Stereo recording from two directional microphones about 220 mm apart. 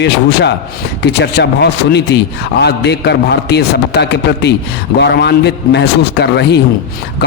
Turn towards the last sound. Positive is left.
turn(degrees=50)  # may be behind; listen again after turning